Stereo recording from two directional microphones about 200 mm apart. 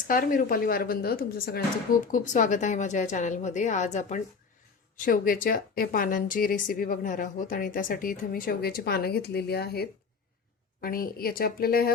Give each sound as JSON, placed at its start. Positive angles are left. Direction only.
{"t": 0.1, "sound": "a woman's voice", "side_deg": 45}
{"t": 2.1, "sound": "a woman's voice", "side_deg": 40}